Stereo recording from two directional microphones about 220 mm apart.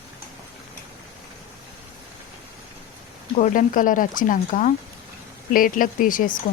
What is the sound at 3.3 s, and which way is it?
Speech, 35° left (ahead or behind).